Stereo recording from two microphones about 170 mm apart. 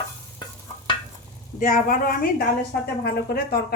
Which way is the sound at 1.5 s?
50° left (ahead or behind).